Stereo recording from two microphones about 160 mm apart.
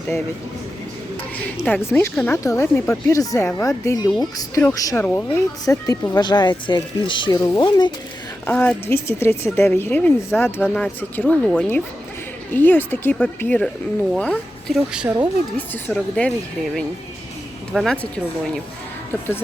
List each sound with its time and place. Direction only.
1.5 s a woman's voice: 10° left (ahead or behind); by 7.9 s 25° left (ahead or behind)
8.4 s a woman's voice: 10° left (ahead or behind); by 15.1 s 5° right (ahead or behind)
15.5 s a woman's voice: 10° left (ahead or behind)
17.7 s speech: centre (ahead or behind)